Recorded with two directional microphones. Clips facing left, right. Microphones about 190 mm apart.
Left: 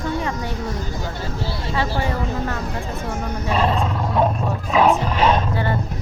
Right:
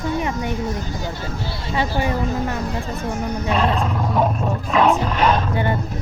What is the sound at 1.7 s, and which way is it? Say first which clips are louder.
Speech: right 2 dB; 20° right (ahead or behind).